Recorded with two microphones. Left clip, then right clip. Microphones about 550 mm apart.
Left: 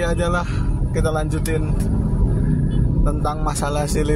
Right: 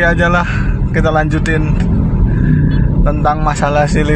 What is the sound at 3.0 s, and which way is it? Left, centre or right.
Speech, left.